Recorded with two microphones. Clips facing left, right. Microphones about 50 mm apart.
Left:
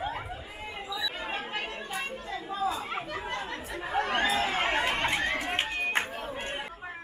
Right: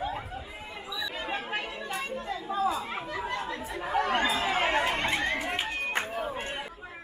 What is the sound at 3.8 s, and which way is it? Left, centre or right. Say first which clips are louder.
Chatter: right 1 dB; centre.